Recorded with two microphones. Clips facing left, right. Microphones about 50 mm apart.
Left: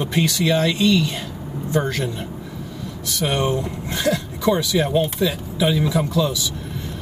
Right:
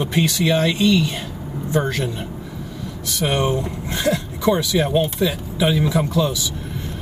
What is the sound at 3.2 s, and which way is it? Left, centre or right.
Speech, right.